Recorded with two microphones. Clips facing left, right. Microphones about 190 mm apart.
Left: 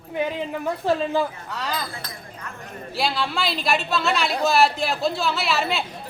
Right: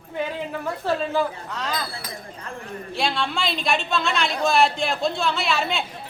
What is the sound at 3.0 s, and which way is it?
Speech, centre (ahead or behind).